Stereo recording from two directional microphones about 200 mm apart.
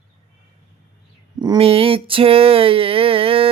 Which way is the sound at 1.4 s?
25° right (ahead or behind).